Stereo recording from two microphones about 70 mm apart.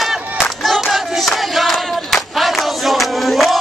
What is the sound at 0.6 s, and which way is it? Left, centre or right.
Battle cry, centre.